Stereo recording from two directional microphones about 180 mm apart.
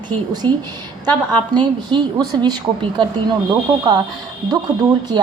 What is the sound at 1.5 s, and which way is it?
A woman's voice, 25° right (ahead or behind).